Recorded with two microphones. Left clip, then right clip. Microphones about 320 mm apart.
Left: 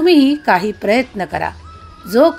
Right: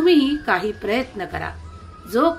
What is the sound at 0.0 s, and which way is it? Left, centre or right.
A woman's voice, left.